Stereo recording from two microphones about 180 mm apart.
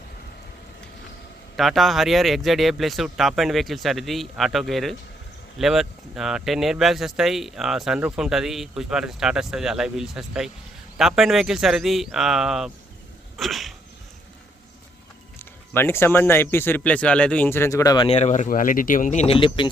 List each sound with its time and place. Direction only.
1.5 s speech: centre (ahead or behind)
13.3 s sneeze: centre (ahead or behind)
15.4 s speech: 10° left (ahead or behind)